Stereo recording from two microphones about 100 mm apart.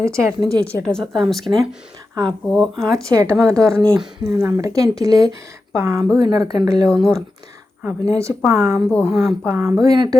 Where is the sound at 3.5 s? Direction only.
35° right (ahead or behind).